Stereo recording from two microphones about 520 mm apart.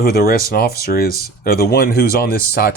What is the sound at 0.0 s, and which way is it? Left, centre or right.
Speech, centre.